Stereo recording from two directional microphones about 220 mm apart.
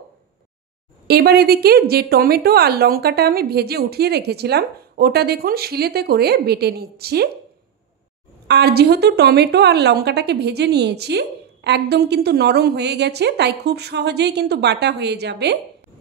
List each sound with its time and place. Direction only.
1.0 s a woman's voice: 45° right (ahead or behind)
8.5 s a woman's voice: 50° right (ahead or behind)